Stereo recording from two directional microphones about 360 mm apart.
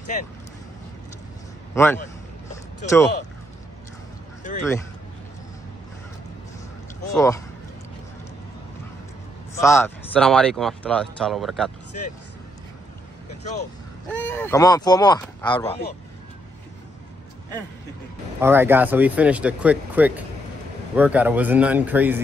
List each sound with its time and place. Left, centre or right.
0.0 s speech: left
1.8 s speech: centre
4.4 s speech: left
7.2 s speech: centre
9.6 s speech: centre
13.3 s vehicle: centre
14.2 s speech: centre
18.4 s speech: centre